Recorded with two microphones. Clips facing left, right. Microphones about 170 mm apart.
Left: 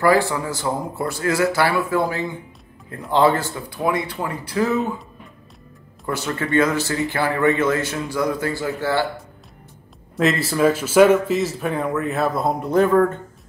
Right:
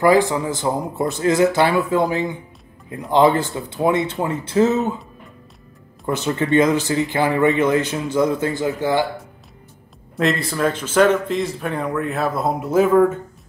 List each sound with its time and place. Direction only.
0.0 s speech: 20° right (ahead or behind)
6.0 s speech: 20° right (ahead or behind)
10.1 s speech: centre (ahead or behind)